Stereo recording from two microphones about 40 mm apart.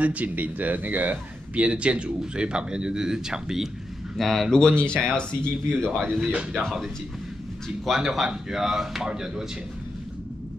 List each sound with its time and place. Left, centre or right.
0.0 s speech: right
1.5 s speech: right; by 3.6 s centre
4.2 s speech: centre
4.5 s speech: centre
6.5 s speech: centre
7.9 s speech: centre